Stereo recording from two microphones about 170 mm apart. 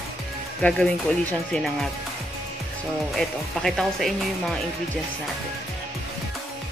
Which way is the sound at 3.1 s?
Centre (ahead or behind).